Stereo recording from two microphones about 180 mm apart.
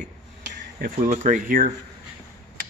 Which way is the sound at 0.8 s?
50° right (ahead or behind).